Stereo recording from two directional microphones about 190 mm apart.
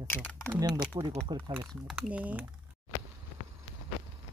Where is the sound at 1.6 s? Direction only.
Centre (ahead or behind).